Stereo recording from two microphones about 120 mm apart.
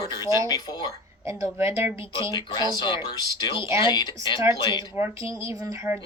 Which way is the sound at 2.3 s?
35° left (ahead or behind).